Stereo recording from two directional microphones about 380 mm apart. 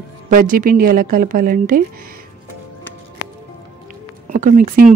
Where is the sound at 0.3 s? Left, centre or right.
Right.